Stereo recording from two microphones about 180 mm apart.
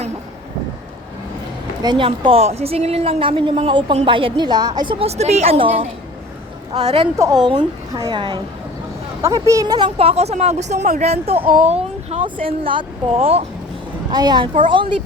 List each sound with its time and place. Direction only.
1.8 s a woman's voice: 25° right (ahead or behind)
12.4 s speech: 30° right (ahead or behind)
14.1 s a woman's voice: 20° right (ahead or behind)